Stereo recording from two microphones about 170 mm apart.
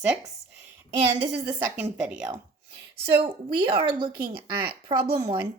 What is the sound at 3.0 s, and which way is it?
Speech, 30° right (ahead or behind).